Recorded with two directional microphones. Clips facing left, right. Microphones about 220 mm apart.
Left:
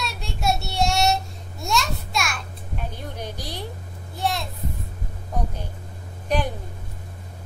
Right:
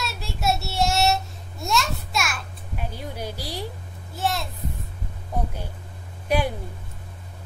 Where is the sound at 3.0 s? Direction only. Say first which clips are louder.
Right 1 dB; 10° right (ahead or behind).